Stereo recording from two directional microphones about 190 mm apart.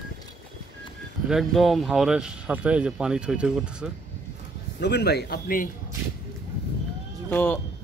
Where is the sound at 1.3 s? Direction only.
Centre (ahead or behind).